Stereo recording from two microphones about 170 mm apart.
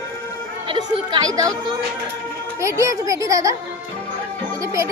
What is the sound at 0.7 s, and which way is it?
Speech, 25° right (ahead or behind).